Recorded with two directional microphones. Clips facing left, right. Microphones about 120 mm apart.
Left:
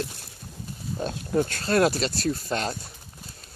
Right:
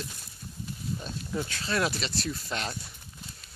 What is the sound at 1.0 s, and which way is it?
Speech, 50° left (ahead or behind).